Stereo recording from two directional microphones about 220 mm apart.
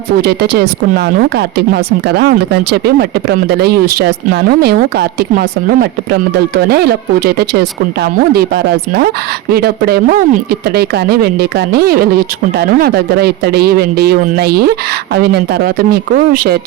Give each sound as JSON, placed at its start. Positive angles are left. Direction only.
{"t": 0.2, "sound": "speech", "side_deg": -45}